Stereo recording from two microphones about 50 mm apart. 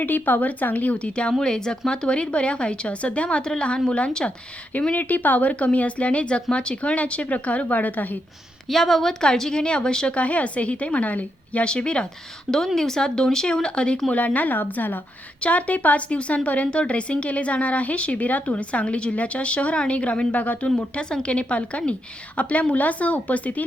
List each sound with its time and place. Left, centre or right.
0.0 s a woman's voice: left
8.6 s a woman's voice: centre
10.2 s a woman's voice: left
15.4 s a woman's voice: left
20.7 s a woman's voice: centre